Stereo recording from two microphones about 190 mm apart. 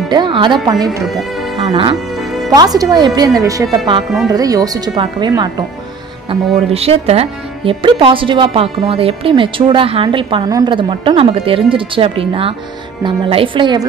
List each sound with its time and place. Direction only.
0.1 s music: 25° right (ahead or behind)
1.0 s speech: centre (ahead or behind)
1.7 s speech: 25° right (ahead or behind)
2.1 s music: centre (ahead or behind)
2.5 s speech: 20° right (ahead or behind)
6.2 s speech: 30° right (ahead or behind)